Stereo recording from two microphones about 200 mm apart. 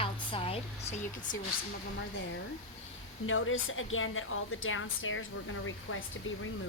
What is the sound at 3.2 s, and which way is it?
A woman's voice, 85° left.